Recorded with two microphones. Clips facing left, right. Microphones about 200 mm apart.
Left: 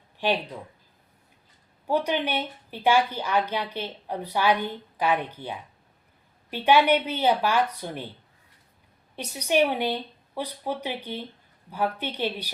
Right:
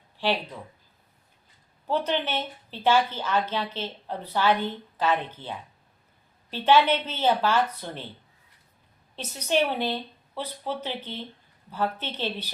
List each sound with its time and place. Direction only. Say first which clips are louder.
0.2 s speech: left 1 dB; 15° left (ahead or behind)
1.9 s a woman's voice: left 2 dB; 10° left (ahead or behind)
9.1 s a woman's voice: left 2 dB; 15° left (ahead or behind)